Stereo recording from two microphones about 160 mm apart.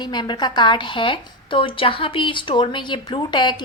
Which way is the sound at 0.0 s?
25° left (ahead or behind).